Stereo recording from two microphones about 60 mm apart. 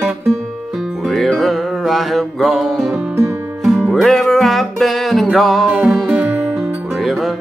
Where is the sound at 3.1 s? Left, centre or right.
Right.